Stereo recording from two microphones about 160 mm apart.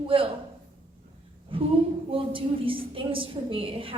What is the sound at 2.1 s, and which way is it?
A woman's voice, 35° right (ahead or behind).